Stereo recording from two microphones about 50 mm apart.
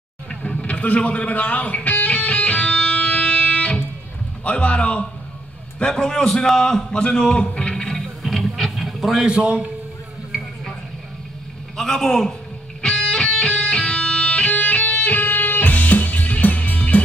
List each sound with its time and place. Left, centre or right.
0.5 s a man's voice: left
1.9 s music: left
4.5 s a man's voice: left
5.8 s a man's voice: centre
7.8 s music: centre
8.5 s a sound: centre
9.3 s a man's voice: right
11.7 s a man's voice: centre
12.8 s music: centre